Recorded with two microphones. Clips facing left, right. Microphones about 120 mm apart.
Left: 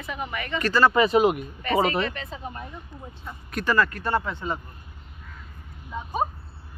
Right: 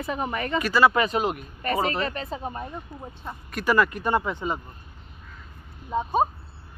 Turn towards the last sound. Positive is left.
turn(degrees=-30)  # may be behind; listen again after turning